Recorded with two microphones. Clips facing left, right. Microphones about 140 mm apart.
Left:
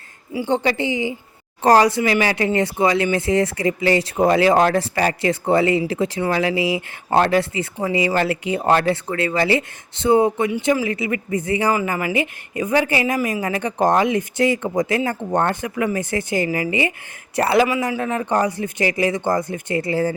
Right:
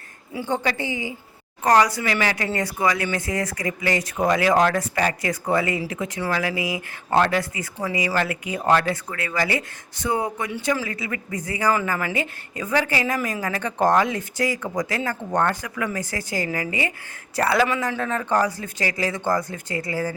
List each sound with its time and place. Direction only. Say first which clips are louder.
0.4 s speech: left 5 dB; 25° left (ahead or behind)
11.7 s speech: left 3 dB; 10° left (ahead or behind); by 20.1 s 25° left (ahead or behind)